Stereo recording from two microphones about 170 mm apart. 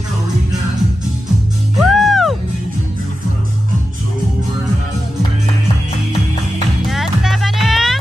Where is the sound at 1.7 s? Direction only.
Centre (ahead or behind).